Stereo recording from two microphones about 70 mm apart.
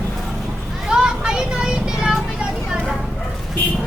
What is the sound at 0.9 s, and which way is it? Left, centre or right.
Vehicle, centre.